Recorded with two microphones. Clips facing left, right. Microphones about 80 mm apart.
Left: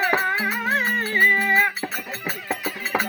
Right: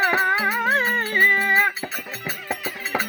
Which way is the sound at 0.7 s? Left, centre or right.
Right.